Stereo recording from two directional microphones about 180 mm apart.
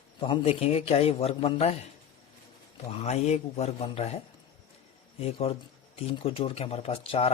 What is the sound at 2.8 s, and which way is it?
Speech, 35° left (ahead or behind).